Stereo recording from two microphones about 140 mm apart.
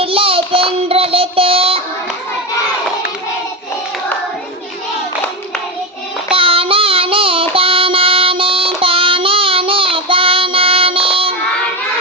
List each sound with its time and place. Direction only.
0.0 s child singing: 40° right (ahead or behind)
6.3 s child singing: 40° right (ahead or behind)